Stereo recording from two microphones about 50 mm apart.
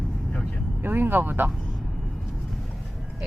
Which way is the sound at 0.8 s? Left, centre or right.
Right.